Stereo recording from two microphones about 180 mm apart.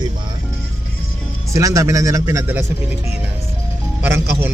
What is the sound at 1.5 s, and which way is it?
Speech, 15° right (ahead or behind).